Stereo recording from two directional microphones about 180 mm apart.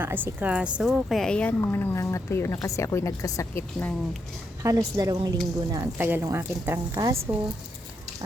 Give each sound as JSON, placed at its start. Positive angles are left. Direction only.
{"t": 0.0, "sound": "a woman's voice", "side_deg": -10}
{"t": 4.6, "sound": "a woman's voice", "side_deg": -20}